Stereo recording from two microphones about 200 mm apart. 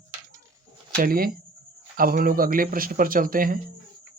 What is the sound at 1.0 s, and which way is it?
Speech, 45° right (ahead or behind).